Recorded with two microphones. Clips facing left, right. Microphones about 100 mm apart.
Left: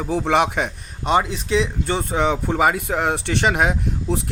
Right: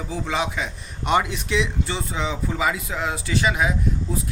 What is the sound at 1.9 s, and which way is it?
Speech, 50° left (ahead or behind).